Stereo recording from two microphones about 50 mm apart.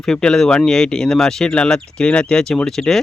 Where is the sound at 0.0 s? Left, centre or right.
Centre.